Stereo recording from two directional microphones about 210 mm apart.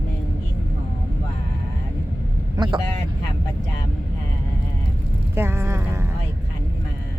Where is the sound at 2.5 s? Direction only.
20° right (ahead or behind).